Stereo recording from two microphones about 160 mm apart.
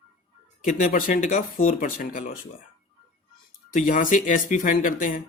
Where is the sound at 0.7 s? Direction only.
55° left (ahead or behind).